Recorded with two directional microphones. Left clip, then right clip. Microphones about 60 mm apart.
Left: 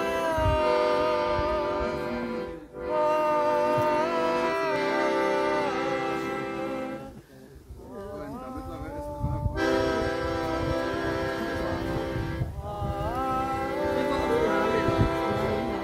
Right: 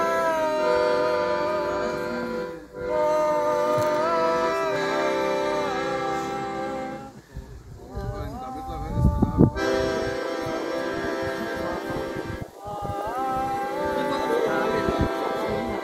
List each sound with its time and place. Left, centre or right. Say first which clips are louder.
0.0 s music: right 4 dB; right
0.6 s music: right 1 dB; right
2.9 s music: right 2 dB; right
9.6 s music: right 1 dB; right
13.7 s music: right 1 dB; right